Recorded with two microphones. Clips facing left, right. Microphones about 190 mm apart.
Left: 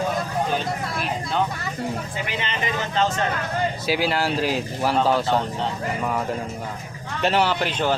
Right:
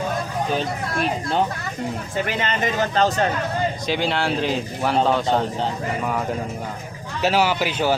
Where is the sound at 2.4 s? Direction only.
45° right (ahead or behind).